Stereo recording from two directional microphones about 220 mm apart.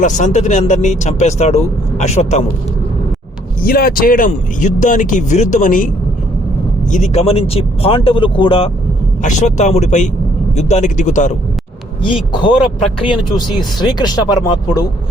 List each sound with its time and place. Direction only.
0.0 s speech: 35° left (ahead or behind)
3.7 s speech: 40° left (ahead or behind)
6.9 s speech: 30° left (ahead or behind)
12.3 s speech: 20° left (ahead or behind)